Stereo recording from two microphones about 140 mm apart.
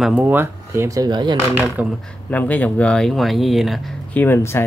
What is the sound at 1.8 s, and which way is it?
Speech, 10° right (ahead or behind).